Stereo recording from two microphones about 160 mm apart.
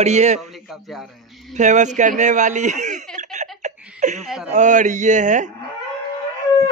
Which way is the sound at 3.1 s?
50° right (ahead or behind).